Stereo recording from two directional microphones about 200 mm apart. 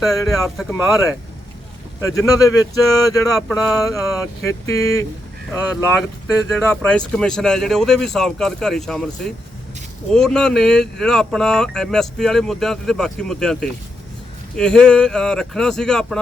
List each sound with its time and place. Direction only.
0.0 s speech: centre (ahead or behind)
2.0 s speech: 15° left (ahead or behind)
3.3 s speech: centre (ahead or behind)
3.8 s speech: 15° left (ahead or behind)
6.6 s speech: 5° left (ahead or behind)